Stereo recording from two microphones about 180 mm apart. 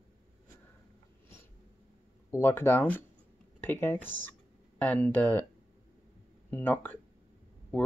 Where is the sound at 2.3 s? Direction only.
10° left (ahead or behind).